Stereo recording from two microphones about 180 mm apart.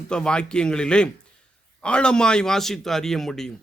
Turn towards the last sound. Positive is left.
turn(degrees=0)  # may be behind; listen again after turning